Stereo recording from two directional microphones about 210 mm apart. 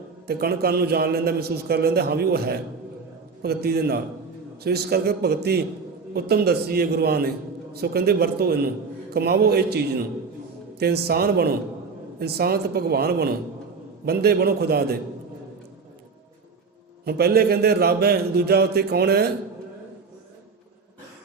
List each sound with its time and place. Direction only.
0.3 s a man's voice: 50° right (ahead or behind)
17.1 s a man's voice: 50° right (ahead or behind)